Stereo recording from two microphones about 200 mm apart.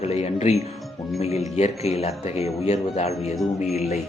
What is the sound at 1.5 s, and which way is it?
A man's voice, 30° left (ahead or behind).